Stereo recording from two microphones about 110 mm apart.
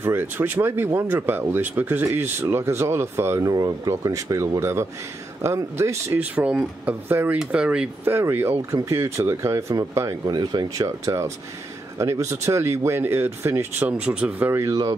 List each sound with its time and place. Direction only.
0.0 s speech: 20° right (ahead or behind)
6.2 s speech: 10° right (ahead or behind)
8.0 s speech: 20° right (ahead or behind)
14.5 s speech: 25° right (ahead or behind)